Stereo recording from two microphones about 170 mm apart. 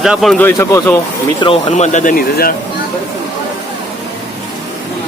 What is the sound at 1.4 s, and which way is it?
Speech, 35° left (ahead or behind).